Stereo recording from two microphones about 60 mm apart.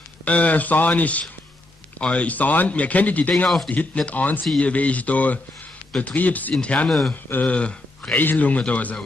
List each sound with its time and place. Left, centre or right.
0.2 s speech: left
6.9 s speech: centre
7.2 s speech: left
7.5 s speech: centre
8.1 s speech: left